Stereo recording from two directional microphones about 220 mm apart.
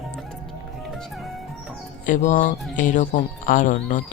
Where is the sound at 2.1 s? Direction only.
35° left (ahead or behind).